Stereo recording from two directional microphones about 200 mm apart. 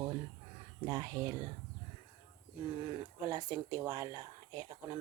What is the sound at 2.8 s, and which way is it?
Speech, 20° right (ahead or behind).